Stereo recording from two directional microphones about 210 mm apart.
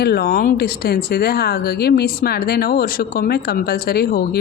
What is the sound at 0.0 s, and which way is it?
Speech, 50° left (ahead or behind).